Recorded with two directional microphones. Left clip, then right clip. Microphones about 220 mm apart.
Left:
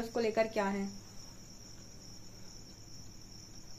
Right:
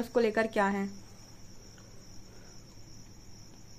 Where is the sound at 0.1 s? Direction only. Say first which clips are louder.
Right 4 dB; 40° right (ahead or behind).